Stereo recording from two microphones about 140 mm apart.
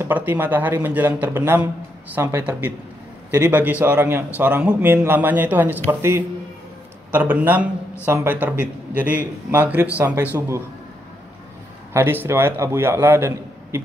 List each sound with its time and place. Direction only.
0.0 s a man's voice: 15° right (ahead or behind)
11.9 s speech: 15° right (ahead or behind)